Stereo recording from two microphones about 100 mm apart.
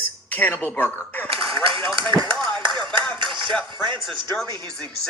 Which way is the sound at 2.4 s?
50° right (ahead or behind).